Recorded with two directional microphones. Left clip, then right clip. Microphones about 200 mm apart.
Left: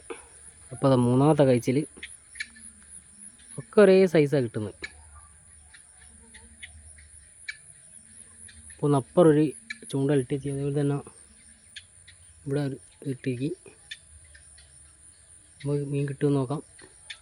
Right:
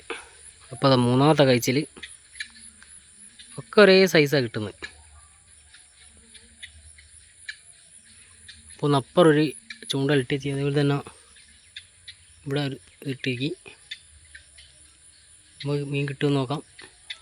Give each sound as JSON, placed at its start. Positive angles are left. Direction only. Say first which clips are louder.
{"t": 0.1, "sound": "a sound", "louder": "right 7 dB", "side_deg": 0}
{"t": 0.8, "sound": "speech", "louder": "right 3 dB", "side_deg": 0}
{"t": 3.5, "sound": "speech", "louder": "right 2 dB", "side_deg": 0}
{"t": 8.5, "sound": "cricket", "louder": "right 8 dB", "side_deg": 50}
{"t": 8.8, "sound": "speech", "louder": "right 2 dB", "side_deg": 0}
{"t": 10.2, "sound": "speech", "louder": "right 4 dB", "side_deg": -15}
{"t": 12.1, "sound": "cricket", "louder": "right 10 dB", "side_deg": 45}
{"t": 12.5, "sound": "speech", "louder": "right 2 dB", "side_deg": 0}
{"t": 15.7, "sound": "speech", "louder": "right 2 dB", "side_deg": -5}